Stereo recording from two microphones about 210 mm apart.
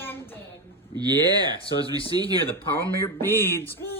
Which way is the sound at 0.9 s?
20° right (ahead or behind).